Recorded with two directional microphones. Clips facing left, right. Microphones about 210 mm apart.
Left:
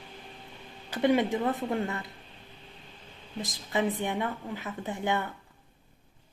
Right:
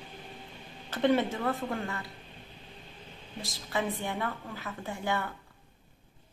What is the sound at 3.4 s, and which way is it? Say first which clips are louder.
A woman's voice: left 3 dB; 15° left (ahead or behind).